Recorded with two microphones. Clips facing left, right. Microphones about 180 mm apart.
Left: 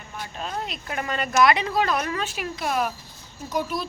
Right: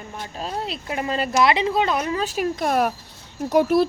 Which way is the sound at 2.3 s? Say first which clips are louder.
Right 6 dB; 45° right (ahead or behind).